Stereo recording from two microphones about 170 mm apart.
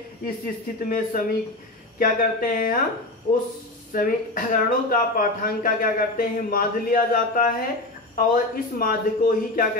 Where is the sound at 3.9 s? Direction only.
55° left (ahead or behind).